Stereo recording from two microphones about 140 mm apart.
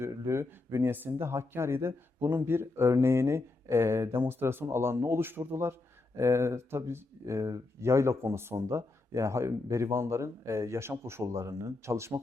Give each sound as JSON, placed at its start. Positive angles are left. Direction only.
{"t": 0.0, "sound": "speech", "side_deg": -20}